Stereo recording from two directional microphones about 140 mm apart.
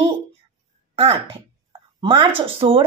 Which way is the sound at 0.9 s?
45° right (ahead or behind).